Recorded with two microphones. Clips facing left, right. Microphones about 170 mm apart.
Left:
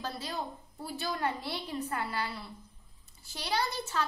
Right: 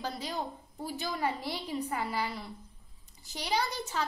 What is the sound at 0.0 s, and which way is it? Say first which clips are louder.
A woman's voice: right 1 dB; 15° right (ahead or behind).